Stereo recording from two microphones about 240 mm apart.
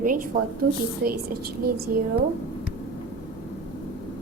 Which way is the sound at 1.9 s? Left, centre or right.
Right.